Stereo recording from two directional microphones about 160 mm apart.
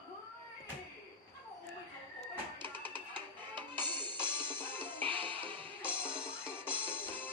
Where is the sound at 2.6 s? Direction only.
30° right (ahead or behind).